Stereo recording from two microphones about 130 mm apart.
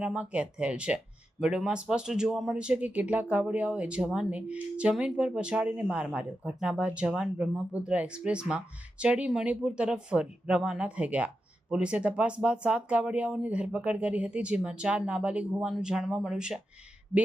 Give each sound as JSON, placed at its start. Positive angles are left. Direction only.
{"t": 0.0, "sound": "speech", "side_deg": -10}